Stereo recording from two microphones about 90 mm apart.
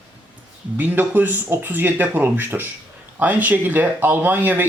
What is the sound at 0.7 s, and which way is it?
Speech, 20° right (ahead or behind).